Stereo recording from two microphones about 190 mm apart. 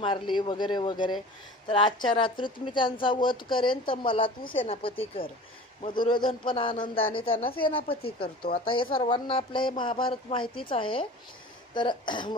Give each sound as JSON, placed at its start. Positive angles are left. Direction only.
{"t": 0.0, "sound": "speech", "side_deg": 25}